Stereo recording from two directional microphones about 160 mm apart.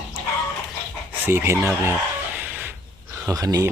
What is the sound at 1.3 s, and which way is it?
Speech, 15° right (ahead or behind).